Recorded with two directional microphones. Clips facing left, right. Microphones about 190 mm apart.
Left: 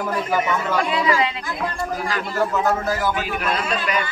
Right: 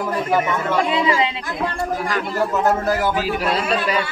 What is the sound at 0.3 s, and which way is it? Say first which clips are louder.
Speech: right 3 dB; 30° right (ahead or behind).